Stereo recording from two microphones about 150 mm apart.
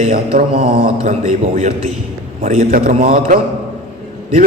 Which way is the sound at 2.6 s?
70° right (ahead or behind).